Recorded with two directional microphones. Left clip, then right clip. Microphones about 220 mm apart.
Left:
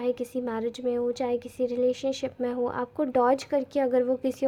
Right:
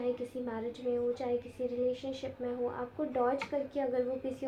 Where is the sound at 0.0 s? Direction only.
45° left (ahead or behind).